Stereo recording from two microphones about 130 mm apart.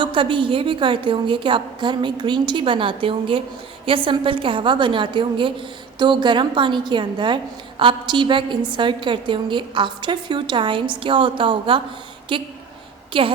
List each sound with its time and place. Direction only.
0.0 s a woman's voice: 40° right (ahead or behind)